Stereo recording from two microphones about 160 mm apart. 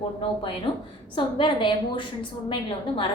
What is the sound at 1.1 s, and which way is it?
A woman's voice, 30° left (ahead or behind).